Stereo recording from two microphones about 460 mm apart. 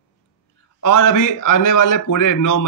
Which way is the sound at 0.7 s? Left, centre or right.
Left.